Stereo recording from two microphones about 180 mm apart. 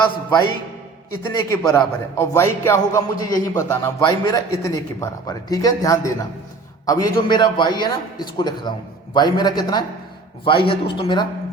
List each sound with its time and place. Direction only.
1.2 s a man's voice: 15° left (ahead or behind)